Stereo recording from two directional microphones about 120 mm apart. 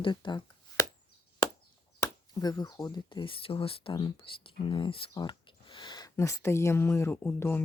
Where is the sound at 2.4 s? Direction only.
35° left (ahead or behind).